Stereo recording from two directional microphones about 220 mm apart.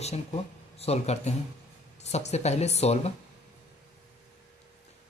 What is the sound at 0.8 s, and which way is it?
Speech, 30° left (ahead or behind).